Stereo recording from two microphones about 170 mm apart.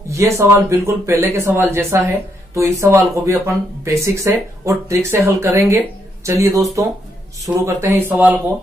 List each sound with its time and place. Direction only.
0.1 s speech: 15° right (ahead or behind)